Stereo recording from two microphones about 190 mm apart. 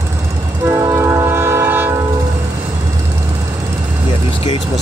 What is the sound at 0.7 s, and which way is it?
Train, 15° right (ahead or behind).